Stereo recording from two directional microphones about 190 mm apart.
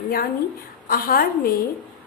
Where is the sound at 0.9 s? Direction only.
50° left (ahead or behind).